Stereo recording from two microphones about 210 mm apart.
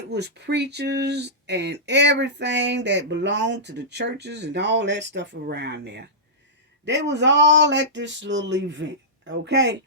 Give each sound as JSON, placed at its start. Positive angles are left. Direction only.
{"t": 0.1, "sound": "speech", "side_deg": -55}